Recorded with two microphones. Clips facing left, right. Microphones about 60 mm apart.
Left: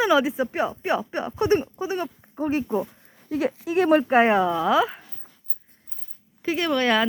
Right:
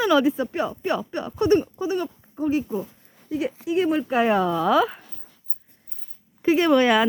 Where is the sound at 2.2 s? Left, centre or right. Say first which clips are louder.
Right 1 dB; left.